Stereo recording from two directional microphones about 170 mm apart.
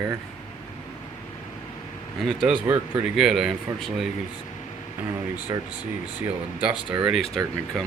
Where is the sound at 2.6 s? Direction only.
15° right (ahead or behind).